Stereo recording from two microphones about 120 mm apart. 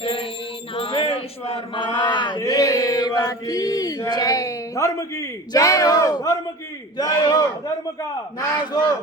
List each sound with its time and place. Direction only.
0.0 s music: 50° left (ahead or behind)
1.0 s a sound: 55° left (ahead or behind)
2.4 s chant: 30° left (ahead or behind)
6.9 s speech: 35° left (ahead or behind)